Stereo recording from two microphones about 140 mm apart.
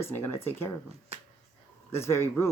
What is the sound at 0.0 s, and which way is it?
Speech, 15° left (ahead or behind).